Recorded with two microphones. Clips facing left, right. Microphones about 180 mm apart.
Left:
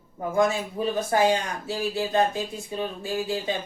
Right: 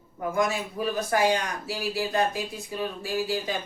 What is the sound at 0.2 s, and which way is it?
Speech, 25° left (ahead or behind).